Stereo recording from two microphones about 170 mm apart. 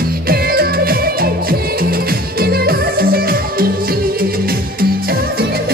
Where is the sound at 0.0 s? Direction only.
60° right (ahead or behind).